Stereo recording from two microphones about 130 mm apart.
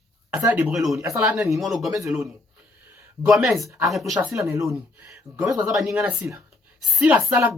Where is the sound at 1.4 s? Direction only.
Centre (ahead or behind).